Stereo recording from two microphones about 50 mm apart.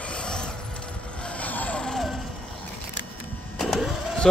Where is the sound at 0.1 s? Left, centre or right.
Centre.